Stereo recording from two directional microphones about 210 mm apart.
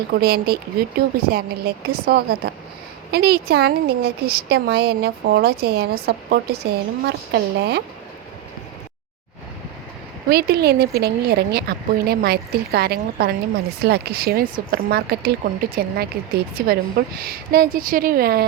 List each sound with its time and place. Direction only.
0.1 s a woman's voice: 45° right (ahead or behind)
10.2 s a woman's voice: 50° right (ahead or behind)